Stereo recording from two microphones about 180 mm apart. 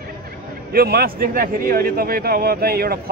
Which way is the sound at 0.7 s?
60° right (ahead or behind).